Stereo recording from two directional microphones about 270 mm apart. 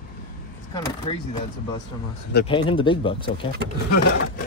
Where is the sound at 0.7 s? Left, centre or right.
Centre.